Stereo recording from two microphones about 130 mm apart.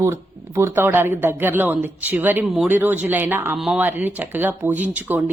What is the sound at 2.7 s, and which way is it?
Speech, 15° right (ahead or behind).